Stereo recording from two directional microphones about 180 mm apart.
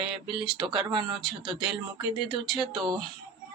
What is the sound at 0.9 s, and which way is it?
Speech, 25° right (ahead or behind).